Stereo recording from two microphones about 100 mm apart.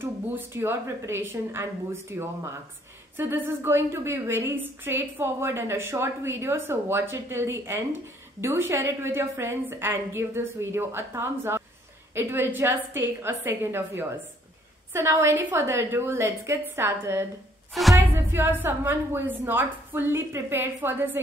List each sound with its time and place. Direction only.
0.0 s a woman's voice: 25° right (ahead or behind)